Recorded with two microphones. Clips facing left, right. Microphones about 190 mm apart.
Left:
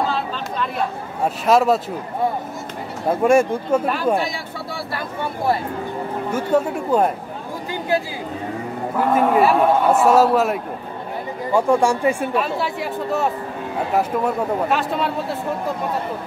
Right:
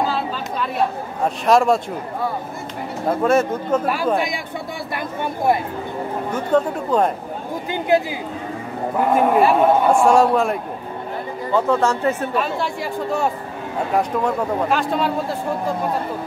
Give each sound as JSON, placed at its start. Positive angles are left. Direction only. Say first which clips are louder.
{"t": 0.0, "sound": "chatter", "louder": "right 1 dB", "side_deg": -5}
{"t": 1.2, "sound": "a man's voice", "louder": "even", "side_deg": 5}
{"t": 3.2, "sound": "speech", "louder": "left 3 dB", "side_deg": 10}
{"t": 3.8, "sound": "speech", "louder": "even", "side_deg": -10}
{"t": 6.3, "sound": "speech", "louder": "even", "side_deg": 10}
{"t": 7.9, "sound": "speech", "louder": "right 4 dB", "side_deg": -20}
{"t": 9.1, "sound": "a man's voice", "louder": "even", "side_deg": 0}